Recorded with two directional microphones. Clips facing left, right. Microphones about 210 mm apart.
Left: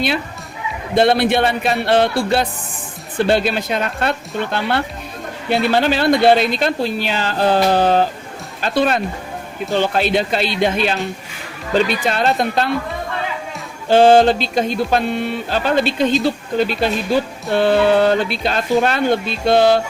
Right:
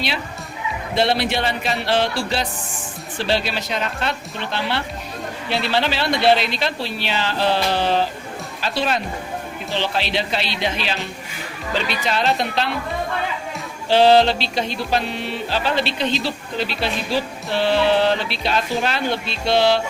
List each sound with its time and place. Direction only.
0.9 s speech: 50° left (ahead or behind)
3.2 s mantra: 50° left (ahead or behind)
13.8 s mantra: 50° left (ahead or behind)